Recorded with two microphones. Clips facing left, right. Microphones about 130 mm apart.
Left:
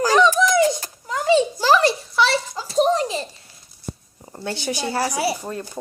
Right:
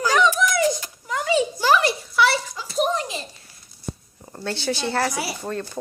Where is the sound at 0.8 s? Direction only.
30° left (ahead or behind).